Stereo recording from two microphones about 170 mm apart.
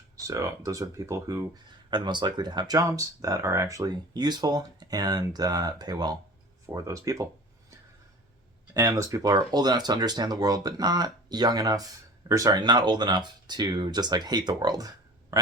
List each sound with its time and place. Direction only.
0.3 s speech: 20° right (ahead or behind)
8.7 s speech: 20° right (ahead or behind)